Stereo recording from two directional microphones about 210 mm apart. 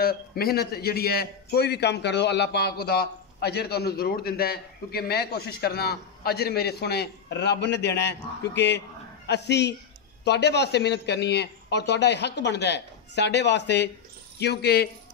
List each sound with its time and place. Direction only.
0.0 s a man's voice: 45° left (ahead or behind)